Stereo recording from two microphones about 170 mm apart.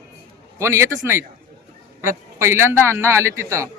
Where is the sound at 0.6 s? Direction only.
15° right (ahead or behind).